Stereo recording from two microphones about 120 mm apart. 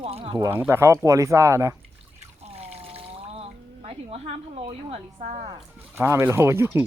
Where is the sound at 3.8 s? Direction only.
55° right (ahead or behind).